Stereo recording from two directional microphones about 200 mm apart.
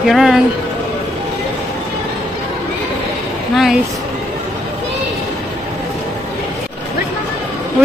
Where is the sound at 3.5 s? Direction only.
Centre (ahead or behind).